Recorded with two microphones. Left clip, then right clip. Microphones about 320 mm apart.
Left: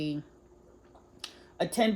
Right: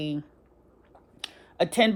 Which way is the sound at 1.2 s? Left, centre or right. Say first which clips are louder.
Right 6 dB; centre.